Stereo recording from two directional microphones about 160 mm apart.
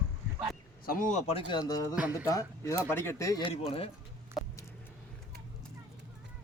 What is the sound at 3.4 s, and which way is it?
Speech, 35° left (ahead or behind).